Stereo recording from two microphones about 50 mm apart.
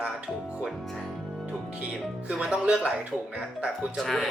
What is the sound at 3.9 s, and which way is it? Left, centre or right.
Speech, centre.